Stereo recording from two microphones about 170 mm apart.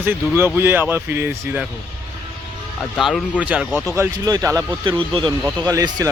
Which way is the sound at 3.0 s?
Centre (ahead or behind).